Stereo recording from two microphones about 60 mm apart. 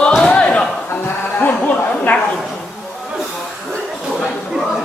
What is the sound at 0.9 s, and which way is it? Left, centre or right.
Music, left.